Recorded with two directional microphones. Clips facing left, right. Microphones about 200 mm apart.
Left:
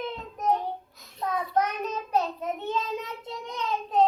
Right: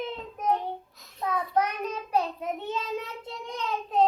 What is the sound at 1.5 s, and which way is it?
Child singing, 10° right (ahead or behind).